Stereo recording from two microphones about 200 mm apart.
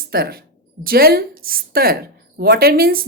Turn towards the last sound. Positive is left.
turn(degrees=-50)  # may be behind; listen again after turning